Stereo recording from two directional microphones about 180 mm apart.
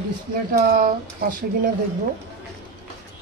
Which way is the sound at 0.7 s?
50° right (ahead or behind).